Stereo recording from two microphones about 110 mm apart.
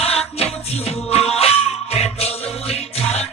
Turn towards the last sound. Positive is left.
turn(degrees=70)  # may be behind; listen again after turning